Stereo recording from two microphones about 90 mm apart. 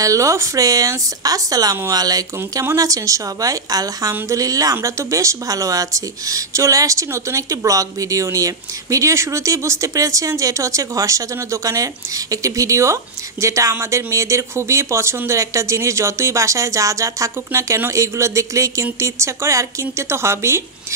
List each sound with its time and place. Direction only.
0.0 s speech: 35° right (ahead or behind)